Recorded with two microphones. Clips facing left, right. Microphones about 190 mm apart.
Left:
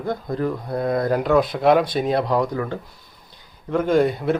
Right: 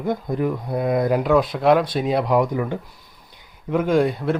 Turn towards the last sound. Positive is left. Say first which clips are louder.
# left 1 dB
turn(degrees=0)  # may be behind; listen again after turning